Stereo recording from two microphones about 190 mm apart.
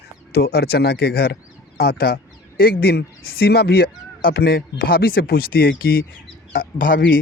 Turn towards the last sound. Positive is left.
turn(degrees=75)  # may be behind; listen again after turning